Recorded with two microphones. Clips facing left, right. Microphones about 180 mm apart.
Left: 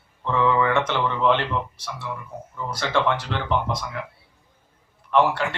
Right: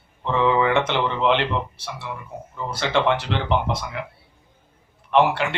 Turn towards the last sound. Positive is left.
turn(degrees=-20)  # may be behind; listen again after turning